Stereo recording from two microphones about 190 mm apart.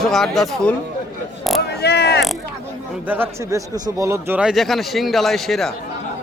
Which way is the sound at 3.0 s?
10° right (ahead or behind).